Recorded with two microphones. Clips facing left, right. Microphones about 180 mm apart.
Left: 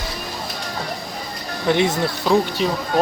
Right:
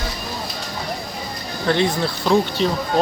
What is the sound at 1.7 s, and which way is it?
Speech, 15° left (ahead or behind).